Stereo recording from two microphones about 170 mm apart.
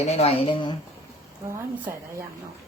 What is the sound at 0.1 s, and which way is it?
Speech, 35° left (ahead or behind).